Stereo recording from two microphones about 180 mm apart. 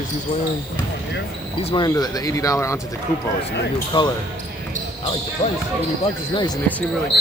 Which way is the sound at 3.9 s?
30° left (ahead or behind).